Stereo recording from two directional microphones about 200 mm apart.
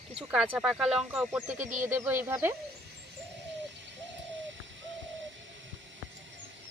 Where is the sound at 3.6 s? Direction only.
65° right (ahead or behind).